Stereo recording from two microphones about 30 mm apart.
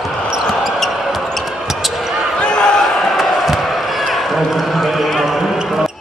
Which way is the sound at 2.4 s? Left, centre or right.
Left.